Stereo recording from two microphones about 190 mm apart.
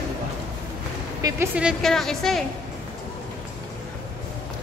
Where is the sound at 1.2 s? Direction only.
20° right (ahead or behind).